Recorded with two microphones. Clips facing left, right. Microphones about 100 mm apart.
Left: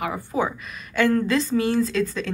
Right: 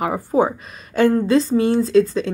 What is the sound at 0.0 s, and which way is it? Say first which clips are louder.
A woman's voice: right 7 dB; 40° right (ahead or behind).